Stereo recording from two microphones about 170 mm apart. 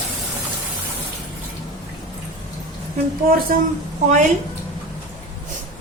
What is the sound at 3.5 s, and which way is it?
Speech, 60° right (ahead or behind).